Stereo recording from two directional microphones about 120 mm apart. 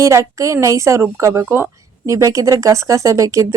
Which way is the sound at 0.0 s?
25° right (ahead or behind).